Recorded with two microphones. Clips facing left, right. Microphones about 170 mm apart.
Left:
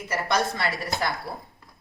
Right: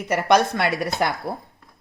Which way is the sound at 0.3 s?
65° right (ahead or behind).